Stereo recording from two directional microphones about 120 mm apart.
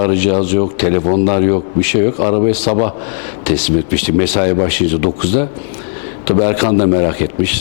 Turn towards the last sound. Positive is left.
turn(degrees=15)  # may be behind; listen again after turning